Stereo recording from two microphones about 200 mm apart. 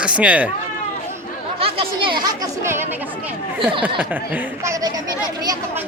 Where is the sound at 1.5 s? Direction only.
30° right (ahead or behind).